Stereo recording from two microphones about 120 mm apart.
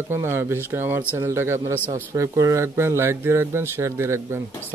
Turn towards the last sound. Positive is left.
turn(degrees=-25)  # may be behind; listen again after turning